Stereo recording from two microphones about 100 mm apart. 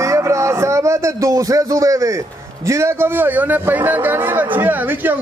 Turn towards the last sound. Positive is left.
turn(degrees=-20)  # may be behind; listen again after turning